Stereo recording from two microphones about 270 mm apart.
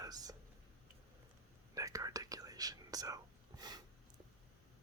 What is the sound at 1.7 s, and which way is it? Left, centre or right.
Whispering, centre.